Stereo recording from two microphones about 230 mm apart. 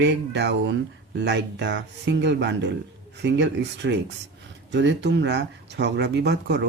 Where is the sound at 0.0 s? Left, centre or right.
Right.